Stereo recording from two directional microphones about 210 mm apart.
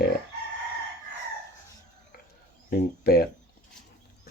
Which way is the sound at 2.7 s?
50° left (ahead or behind).